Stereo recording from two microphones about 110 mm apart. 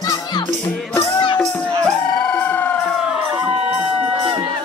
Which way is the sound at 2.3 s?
15° left (ahead or behind).